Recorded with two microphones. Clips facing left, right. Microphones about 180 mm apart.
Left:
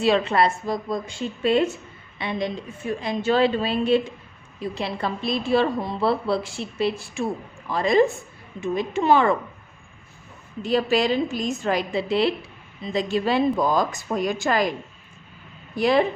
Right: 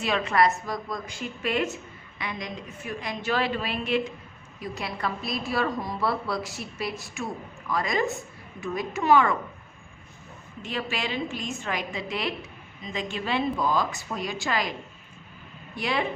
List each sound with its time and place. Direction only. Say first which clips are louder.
0.0 s a woman's voice: left 4 dB; 30° left (ahead or behind)
10.6 s a woman's voice: left 11 dB; 35° left (ahead or behind)
15.7 s a woman's voice: left 9 dB; 40° left (ahead or behind)